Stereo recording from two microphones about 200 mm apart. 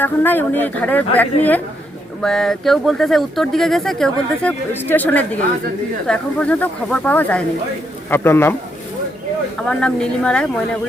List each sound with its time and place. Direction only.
0.0 s speech: 10° left (ahead or behind)
9.6 s speech: 5° left (ahead or behind)